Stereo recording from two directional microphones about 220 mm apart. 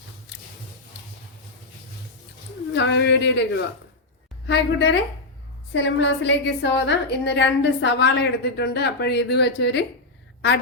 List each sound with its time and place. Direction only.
2.7 s a woman's voice: 50° left (ahead or behind)